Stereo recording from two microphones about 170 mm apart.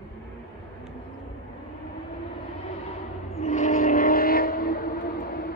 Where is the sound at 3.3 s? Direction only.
40° left (ahead or behind).